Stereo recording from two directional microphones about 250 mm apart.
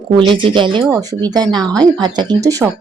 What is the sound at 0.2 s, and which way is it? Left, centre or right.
Speech, centre.